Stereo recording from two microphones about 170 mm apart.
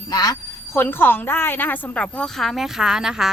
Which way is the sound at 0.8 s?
10° left (ahead or behind).